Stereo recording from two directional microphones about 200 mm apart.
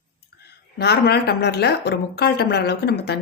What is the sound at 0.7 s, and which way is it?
Speech, 55° left (ahead or behind).